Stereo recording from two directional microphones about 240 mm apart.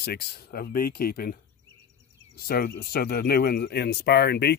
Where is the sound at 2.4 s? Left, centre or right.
Left.